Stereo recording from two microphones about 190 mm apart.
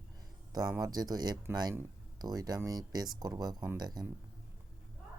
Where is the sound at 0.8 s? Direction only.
20° right (ahead or behind).